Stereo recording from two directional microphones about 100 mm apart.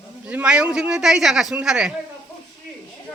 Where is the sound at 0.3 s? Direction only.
10° right (ahead or behind).